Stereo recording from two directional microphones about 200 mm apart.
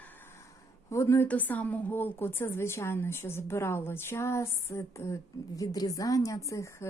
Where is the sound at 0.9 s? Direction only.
15° left (ahead or behind).